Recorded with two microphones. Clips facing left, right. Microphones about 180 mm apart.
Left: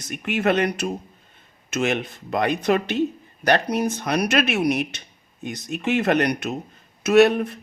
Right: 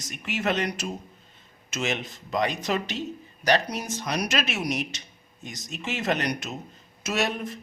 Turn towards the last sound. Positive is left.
turn(degrees=60)  # may be behind; listen again after turning